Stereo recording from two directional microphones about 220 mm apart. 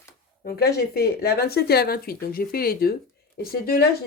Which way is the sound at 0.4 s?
45° left (ahead or behind).